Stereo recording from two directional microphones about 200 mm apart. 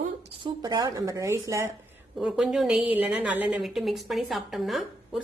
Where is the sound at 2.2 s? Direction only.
5° right (ahead or behind).